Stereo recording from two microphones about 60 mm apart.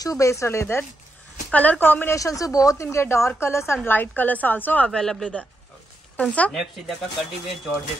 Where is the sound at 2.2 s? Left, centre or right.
Left.